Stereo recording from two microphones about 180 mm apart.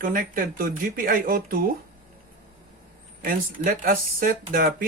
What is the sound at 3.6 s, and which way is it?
Speech, 55° right (ahead or behind).